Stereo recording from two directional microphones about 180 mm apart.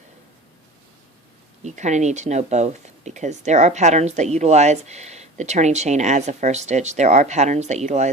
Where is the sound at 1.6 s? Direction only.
40° right (ahead or behind).